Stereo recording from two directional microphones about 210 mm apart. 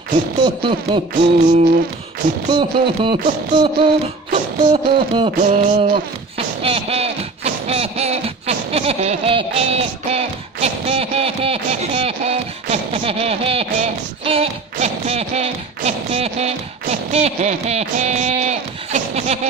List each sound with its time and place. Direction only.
0.4 s music: 25° right (ahead or behind)
1.1 s music: 35° right (ahead or behind)
2.5 s music: 25° right (ahead or behind)
4.3 s a sound: 25° right (ahead or behind)
5.4 s music: 35° right (ahead or behind)